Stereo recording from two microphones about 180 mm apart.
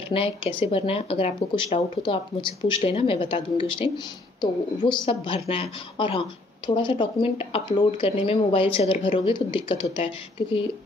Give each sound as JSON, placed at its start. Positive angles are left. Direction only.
{"t": 0.1, "sound": "a woman's voice", "side_deg": 30}
{"t": 5.0, "sound": "a woman's voice", "side_deg": 30}